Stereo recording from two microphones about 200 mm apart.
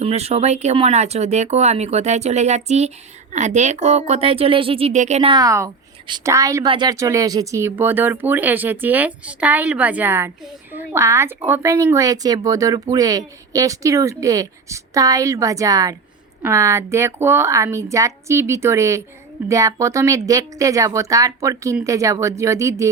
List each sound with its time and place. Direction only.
0.0 s speech: 30° right (ahead or behind)
5.3 s a woman's voice: 15° right (ahead or behind)